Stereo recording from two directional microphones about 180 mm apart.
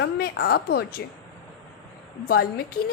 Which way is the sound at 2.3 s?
55° left (ahead or behind).